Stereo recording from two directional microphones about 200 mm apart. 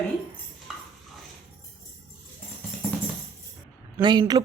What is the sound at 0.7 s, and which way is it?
Stir, centre (ahead or behind).